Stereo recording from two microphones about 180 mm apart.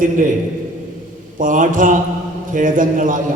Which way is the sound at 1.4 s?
45° right (ahead or behind).